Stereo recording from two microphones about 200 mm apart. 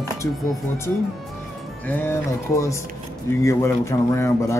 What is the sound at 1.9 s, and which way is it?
Speech, 10° left (ahead or behind).